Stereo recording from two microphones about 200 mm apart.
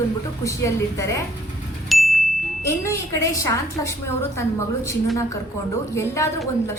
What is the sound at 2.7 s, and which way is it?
A woman's voice, 15° left (ahead or behind).